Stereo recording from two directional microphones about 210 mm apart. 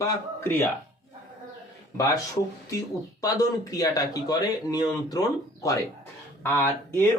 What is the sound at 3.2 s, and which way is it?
Speech, 15° left (ahead or behind).